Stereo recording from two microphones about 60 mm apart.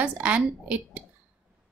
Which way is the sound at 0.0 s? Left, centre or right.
Right.